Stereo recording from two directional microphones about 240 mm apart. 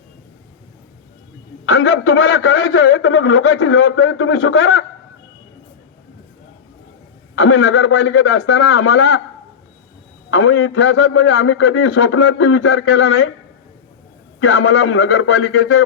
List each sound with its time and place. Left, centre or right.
1.6 s a man's voice: left
7.3 s a man's voice: left
10.3 s a man's voice: left
14.3 s a man's voice: left